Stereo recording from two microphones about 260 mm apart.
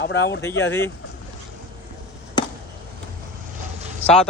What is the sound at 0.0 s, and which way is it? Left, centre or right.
Speech, left.